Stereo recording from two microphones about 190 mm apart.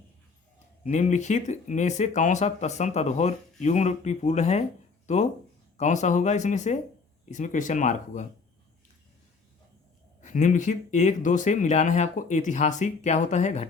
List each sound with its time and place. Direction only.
0.9 s speech: 40° left (ahead or behind)
10.2 s speech: 40° left (ahead or behind)